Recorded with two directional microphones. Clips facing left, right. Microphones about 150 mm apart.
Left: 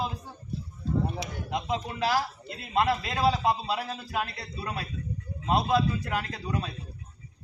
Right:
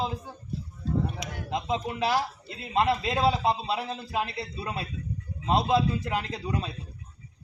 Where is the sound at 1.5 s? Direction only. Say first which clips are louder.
Right 2 dB; 20° right (ahead or behind).